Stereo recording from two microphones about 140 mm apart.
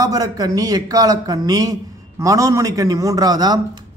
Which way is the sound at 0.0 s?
25° right (ahead or behind).